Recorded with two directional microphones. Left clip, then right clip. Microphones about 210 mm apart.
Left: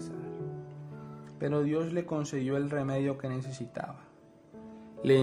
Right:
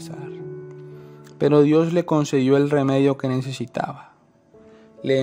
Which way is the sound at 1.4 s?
40° right (ahead or behind).